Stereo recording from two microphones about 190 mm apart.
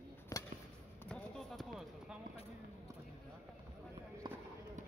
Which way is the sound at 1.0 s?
5° left (ahead or behind).